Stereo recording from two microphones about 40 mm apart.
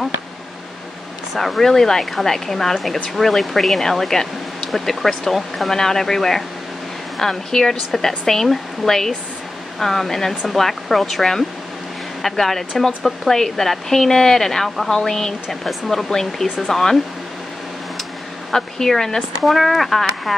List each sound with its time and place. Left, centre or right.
1.3 s speech: centre
18.5 s speech: centre